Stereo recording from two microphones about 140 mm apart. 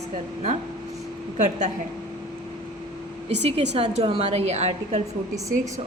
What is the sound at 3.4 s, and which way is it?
A woman's voice, 50° right (ahead or behind).